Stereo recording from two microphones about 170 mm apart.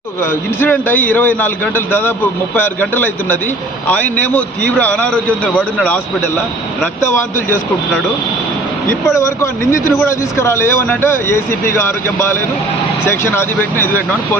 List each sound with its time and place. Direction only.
0.2 s speech: 15° left (ahead or behind)
8.9 s speech: 15° left (ahead or behind)